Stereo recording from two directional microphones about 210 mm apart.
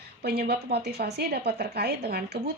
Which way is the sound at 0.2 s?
50° right (ahead or behind).